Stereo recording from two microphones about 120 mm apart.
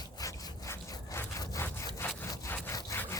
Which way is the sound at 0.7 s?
25° left (ahead or behind).